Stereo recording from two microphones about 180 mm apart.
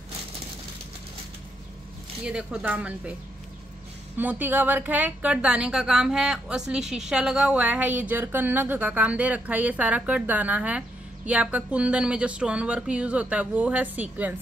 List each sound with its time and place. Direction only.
2.2 s speech: 5° right (ahead or behind)
4.2 s speech: 10° right (ahead or behind)